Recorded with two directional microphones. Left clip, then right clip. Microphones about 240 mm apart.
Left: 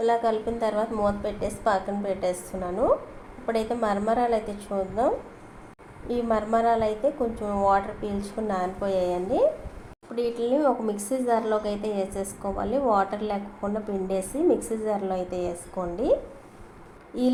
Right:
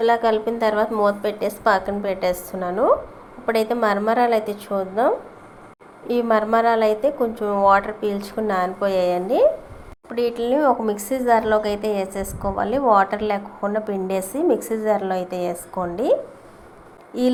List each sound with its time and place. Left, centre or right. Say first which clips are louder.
0.0 s a woman's voice: right 6 dB; centre
17.1 s a woman's voice: right 5 dB; centre